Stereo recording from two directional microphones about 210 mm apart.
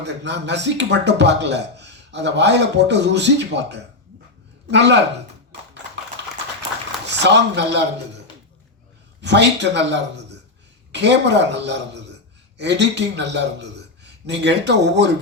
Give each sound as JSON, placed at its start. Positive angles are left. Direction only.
{"t": 0.0, "sound": "speech", "side_deg": -55}
{"t": 7.2, "sound": "speech", "side_deg": -55}
{"t": 9.2, "sound": "a man's voice", "side_deg": -55}